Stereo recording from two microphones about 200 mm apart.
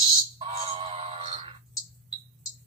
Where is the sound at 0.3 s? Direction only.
25° right (ahead or behind).